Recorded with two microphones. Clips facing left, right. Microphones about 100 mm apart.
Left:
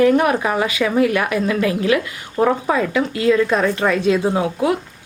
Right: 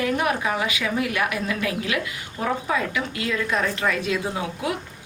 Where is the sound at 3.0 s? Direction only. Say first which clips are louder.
Left 10 dB; 45° left (ahead or behind).